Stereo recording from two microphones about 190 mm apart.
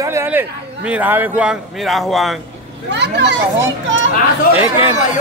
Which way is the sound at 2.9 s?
65° right (ahead or behind).